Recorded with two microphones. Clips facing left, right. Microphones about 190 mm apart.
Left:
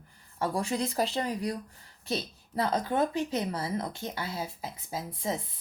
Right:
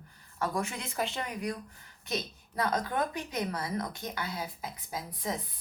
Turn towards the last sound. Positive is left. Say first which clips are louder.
# left 3 dB
turn(degrees=25)  # may be behind; listen again after turning